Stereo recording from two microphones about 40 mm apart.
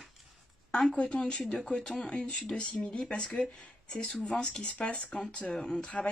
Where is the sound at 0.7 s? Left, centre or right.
Centre.